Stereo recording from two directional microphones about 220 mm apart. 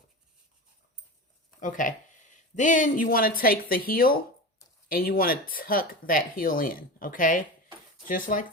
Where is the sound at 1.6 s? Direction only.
35° left (ahead or behind).